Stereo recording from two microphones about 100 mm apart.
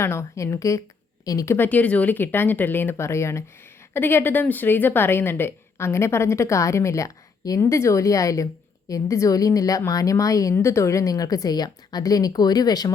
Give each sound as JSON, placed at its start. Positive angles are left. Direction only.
{"t": 0.0, "sound": "a woman's voice", "side_deg": 25}
{"t": 1.5, "sound": "a woman's voice", "side_deg": 20}